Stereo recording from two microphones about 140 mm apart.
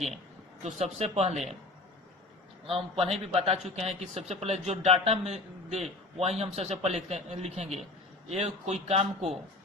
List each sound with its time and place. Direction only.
0.6 s speech: 50° right (ahead or behind)
2.6 s speech: 45° right (ahead or behind)